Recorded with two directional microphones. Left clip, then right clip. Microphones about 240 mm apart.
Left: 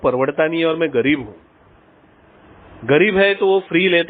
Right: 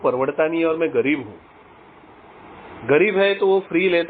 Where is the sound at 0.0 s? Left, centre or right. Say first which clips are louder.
Left 3 dB; left.